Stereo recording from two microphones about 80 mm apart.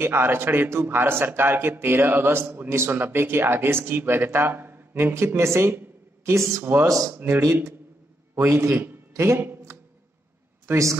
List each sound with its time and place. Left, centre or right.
0.0 s speech: right
7.2 s a man's voice: right
10.7 s a woman's voice: right